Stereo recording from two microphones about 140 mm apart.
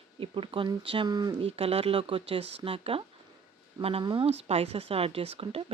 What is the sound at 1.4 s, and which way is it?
Speech, 45° right (ahead or behind).